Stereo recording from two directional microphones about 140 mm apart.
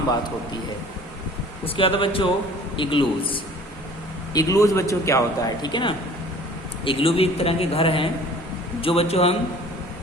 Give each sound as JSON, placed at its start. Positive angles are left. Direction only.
{"t": 1.6, "sound": "a man's voice", "side_deg": 40}
{"t": 4.4, "sound": "speech", "side_deg": 25}
{"t": 6.8, "sound": "a man's voice", "side_deg": 40}